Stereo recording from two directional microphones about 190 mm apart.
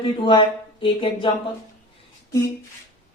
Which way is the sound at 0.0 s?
25° left (ahead or behind).